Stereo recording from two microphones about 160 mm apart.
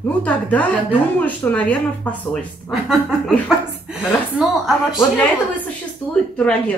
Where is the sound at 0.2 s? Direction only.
10° left (ahead or behind).